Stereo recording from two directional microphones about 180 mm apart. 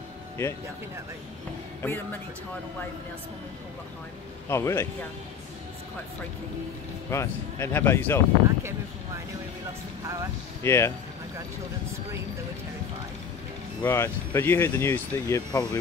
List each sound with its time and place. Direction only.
1.8 s a man's voice: 10° left (ahead or behind)
4.5 s speech: 15° left (ahead or behind)
7.1 s speech: 15° left (ahead or behind)
8.5 s speech: 15° right (ahead or behind)
10.6 s speech: 15° left (ahead or behind)
13.8 s speech: 15° left (ahead or behind)